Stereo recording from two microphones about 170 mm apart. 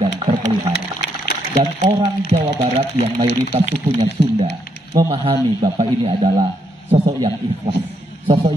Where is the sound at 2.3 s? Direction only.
35° right (ahead or behind).